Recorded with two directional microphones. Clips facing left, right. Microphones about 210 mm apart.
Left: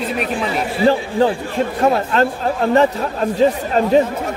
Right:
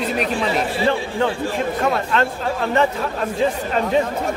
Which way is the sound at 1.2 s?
35° left (ahead or behind).